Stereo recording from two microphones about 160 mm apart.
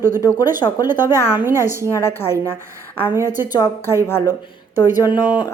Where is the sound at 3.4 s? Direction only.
25° left (ahead or behind).